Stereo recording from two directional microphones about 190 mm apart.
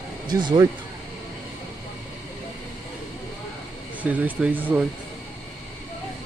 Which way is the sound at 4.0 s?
10° right (ahead or behind).